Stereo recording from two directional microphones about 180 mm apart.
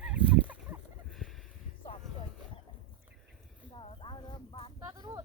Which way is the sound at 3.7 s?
30° left (ahead or behind).